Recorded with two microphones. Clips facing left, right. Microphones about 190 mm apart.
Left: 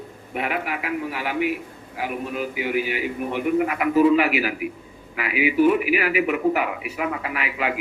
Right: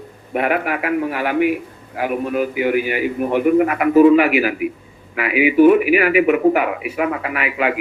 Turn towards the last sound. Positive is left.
turn(degrees=-65)  # may be behind; listen again after turning